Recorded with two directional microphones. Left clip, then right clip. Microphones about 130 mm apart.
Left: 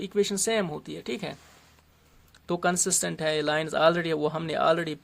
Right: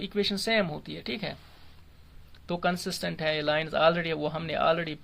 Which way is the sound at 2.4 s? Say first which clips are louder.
Left 3 dB; 45° left (ahead or behind).